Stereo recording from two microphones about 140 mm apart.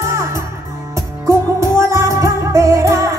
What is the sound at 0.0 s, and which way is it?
Music, 20° right (ahead or behind).